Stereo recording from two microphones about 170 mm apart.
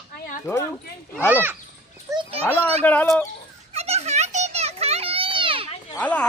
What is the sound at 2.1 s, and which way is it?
Children playing, 20° right (ahead or behind).